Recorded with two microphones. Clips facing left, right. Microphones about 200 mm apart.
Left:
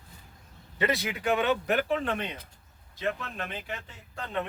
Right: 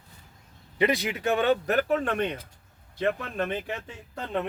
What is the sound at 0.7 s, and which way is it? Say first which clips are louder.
Speech: right 4 dB; 15° right (ahead or behind).